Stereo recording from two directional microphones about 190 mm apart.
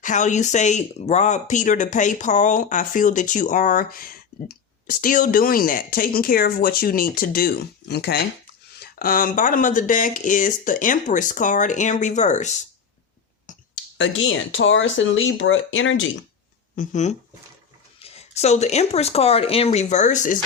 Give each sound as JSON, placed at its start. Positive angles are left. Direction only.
{"t": 0.0, "sound": "speech", "side_deg": 40}
{"t": 8.8, "sound": "speech", "side_deg": 50}
{"t": 13.5, "sound": "clicking", "side_deg": 40}
{"t": 14.0, "sound": "speech", "side_deg": 90}
{"t": 16.7, "sound": "speech", "side_deg": 40}